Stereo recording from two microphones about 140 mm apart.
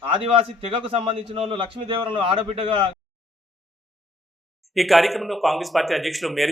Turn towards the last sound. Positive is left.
turn(degrees=0)  # may be behind; listen again after turning